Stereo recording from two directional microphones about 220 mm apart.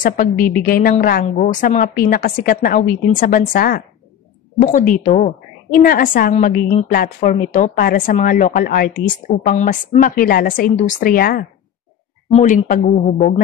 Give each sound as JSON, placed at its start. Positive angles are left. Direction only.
{"t": 0.0, "sound": "a woman's voice", "side_deg": 35}